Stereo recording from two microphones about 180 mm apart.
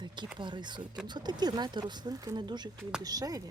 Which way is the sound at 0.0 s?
25° right (ahead or behind).